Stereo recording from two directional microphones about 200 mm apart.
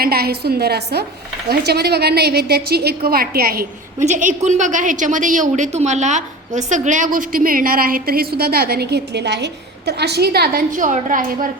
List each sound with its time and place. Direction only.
0.0 s a woman's voice: 50° right (ahead or behind)